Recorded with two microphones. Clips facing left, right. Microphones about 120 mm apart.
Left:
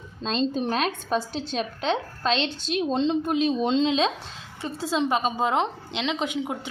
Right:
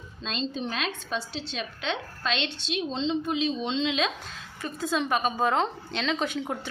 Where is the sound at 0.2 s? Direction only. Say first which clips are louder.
Left 6 dB; 40° left (ahead or behind).